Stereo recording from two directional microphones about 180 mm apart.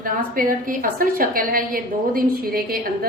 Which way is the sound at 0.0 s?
50° right (ahead or behind).